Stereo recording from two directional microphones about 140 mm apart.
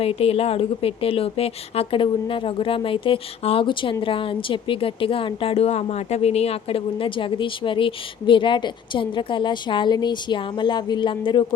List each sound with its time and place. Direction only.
0.0 s a woman's voice: 45° left (ahead or behind)